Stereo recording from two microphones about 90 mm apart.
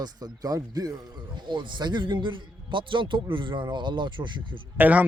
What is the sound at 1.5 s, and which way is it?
A man's voice, 60° right (ahead or behind).